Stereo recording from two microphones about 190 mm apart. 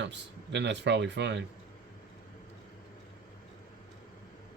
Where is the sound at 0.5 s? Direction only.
65° right (ahead or behind).